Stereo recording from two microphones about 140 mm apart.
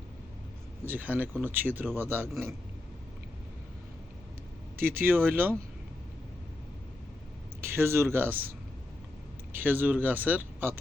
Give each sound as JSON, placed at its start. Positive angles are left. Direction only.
{"t": 0.9, "sound": "speech", "side_deg": -10}
{"t": 4.8, "sound": "speech", "side_deg": -90}
{"t": 5.0, "sound": "speech", "side_deg": -15}
{"t": 7.6, "sound": "speech", "side_deg": -15}
{"t": 9.6, "sound": "speech", "side_deg": -15}